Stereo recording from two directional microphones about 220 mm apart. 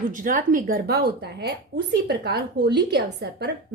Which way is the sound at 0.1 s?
35° right (ahead or behind).